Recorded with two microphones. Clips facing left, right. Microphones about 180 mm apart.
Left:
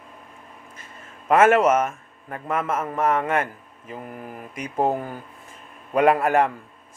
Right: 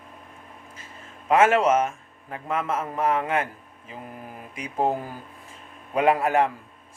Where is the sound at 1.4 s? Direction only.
50° left (ahead or behind).